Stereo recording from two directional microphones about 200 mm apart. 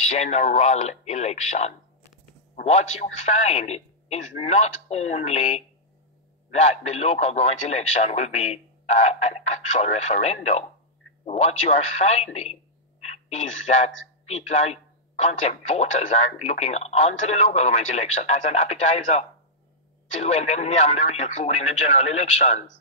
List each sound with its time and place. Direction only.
0.0 s a man's voice: 35° left (ahead or behind)
3.3 s a man's voice: 35° left (ahead or behind)
13.7 s a man's voice: 35° left (ahead or behind)